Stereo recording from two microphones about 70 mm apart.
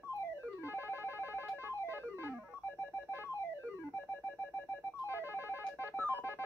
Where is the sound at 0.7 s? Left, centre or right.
Left.